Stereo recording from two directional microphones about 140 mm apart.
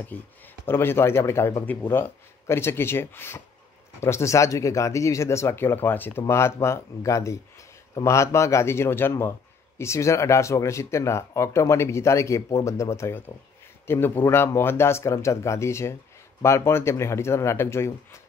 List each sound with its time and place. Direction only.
0.1 s speech: 10° left (ahead or behind)